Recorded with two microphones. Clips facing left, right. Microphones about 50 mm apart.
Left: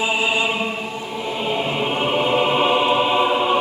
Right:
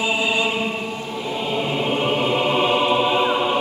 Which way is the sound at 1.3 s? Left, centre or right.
Centre.